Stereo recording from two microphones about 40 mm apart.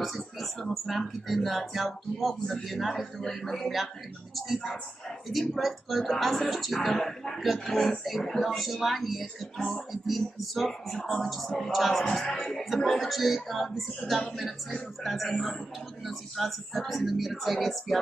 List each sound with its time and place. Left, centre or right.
0.0 s a sound: centre
0.7 s speech: centre
7.0 s speech: centre
7.3 s speech: centre
11.0 s speech: centre
11.2 s speech: centre